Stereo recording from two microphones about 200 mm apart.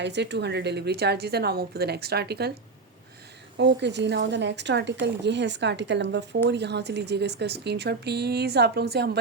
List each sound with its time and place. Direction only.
0.0 s a woman's voice: 60° right (ahead or behind)
3.6 s speech: 60° right (ahead or behind)